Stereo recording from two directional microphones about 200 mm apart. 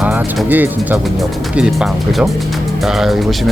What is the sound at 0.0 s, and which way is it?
Speech, 5° right (ahead or behind).